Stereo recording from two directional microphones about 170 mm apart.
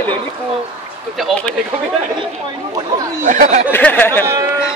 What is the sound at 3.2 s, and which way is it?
Speech, 50° right (ahead or behind).